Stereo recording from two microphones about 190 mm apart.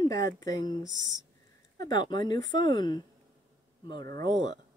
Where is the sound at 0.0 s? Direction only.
15° left (ahead or behind).